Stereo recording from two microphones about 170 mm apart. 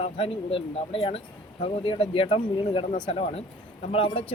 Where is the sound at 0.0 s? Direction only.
35° left (ahead or behind).